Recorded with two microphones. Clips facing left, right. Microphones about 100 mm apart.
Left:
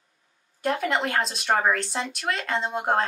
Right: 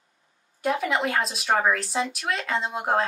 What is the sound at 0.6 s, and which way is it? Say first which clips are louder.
Speech: even; centre (ahead or behind).